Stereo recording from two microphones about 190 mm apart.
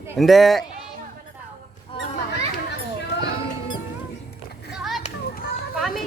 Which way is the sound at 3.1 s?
65° left (ahead or behind).